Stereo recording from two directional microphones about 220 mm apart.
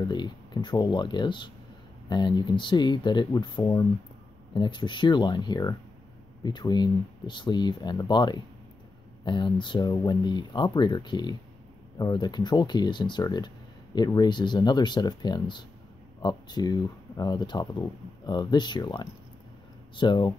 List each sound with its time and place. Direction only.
0.1 s speech: 20° left (ahead or behind)